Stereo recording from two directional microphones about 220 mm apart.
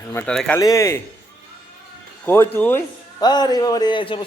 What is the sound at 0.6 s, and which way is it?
Speech, 15° left (ahead or behind).